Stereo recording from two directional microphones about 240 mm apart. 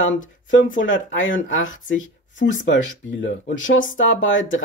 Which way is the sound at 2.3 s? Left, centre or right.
Left.